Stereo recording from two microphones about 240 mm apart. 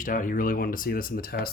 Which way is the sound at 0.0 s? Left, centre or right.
Left.